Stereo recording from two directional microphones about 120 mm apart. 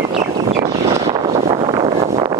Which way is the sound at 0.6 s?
50° right (ahead or behind).